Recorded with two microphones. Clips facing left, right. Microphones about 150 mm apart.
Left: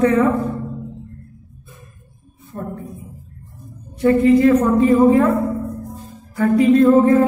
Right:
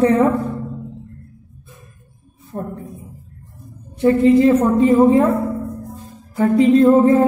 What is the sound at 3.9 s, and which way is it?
Music, 25° right (ahead or behind).